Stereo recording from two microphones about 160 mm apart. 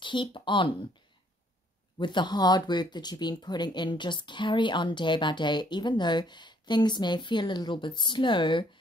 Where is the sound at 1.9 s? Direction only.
30° left (ahead or behind).